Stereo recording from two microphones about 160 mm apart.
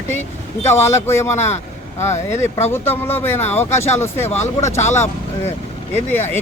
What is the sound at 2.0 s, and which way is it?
Speech, 45° left (ahead or behind).